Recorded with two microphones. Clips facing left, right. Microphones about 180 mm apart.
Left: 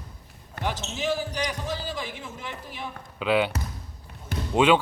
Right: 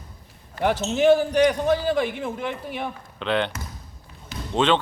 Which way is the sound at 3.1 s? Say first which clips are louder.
Left 1 dB; 5° left (ahead or behind).